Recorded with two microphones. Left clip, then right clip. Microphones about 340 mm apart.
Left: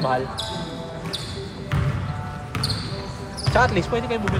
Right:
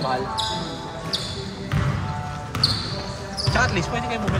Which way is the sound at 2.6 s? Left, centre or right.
Right.